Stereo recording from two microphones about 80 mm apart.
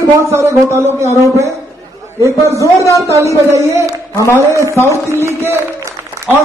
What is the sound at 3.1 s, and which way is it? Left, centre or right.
A man's voice, right.